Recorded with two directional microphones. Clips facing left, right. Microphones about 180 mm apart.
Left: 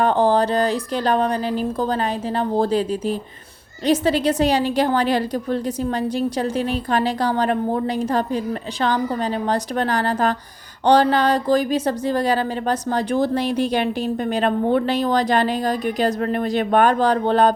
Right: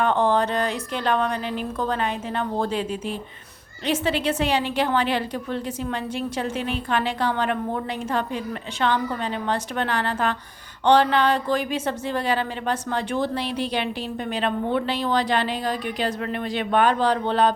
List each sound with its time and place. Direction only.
0.0 s a woman's voice: 35° left (ahead or behind)